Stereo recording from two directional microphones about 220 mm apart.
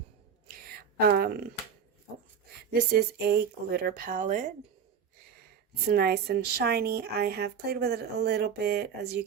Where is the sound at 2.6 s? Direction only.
45° right (ahead or behind).